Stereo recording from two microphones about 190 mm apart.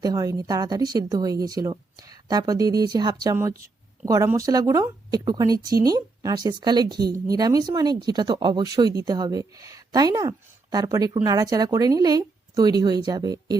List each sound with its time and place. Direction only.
0.0 s a woman's voice: 20° right (ahead or behind)